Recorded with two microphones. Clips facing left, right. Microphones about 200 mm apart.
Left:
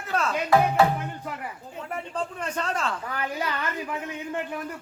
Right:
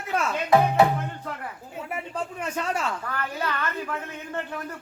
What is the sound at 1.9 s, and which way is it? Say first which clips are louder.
Speech: left 1 dB; 10° right (ahead or behind).